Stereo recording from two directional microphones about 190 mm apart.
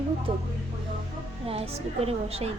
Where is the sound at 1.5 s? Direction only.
30° right (ahead or behind).